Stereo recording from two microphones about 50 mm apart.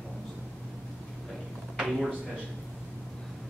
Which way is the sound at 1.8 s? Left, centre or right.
Centre.